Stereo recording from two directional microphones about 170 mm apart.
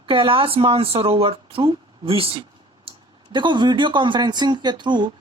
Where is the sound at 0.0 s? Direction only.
30° right (ahead or behind).